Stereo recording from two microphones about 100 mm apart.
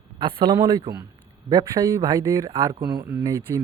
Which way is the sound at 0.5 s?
40° right (ahead or behind).